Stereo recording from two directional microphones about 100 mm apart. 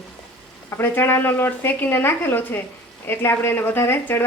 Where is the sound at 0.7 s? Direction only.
20° left (ahead or behind).